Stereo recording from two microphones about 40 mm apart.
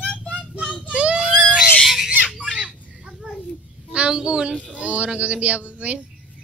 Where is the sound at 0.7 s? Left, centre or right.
Right.